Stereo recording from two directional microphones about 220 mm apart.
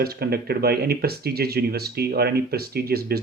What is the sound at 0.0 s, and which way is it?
Speech, 45° right (ahead or behind).